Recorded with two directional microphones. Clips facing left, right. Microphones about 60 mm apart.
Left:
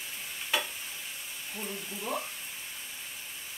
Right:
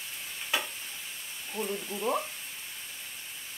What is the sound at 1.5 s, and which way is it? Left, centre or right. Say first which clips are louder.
Speech: right 6 dB; centre.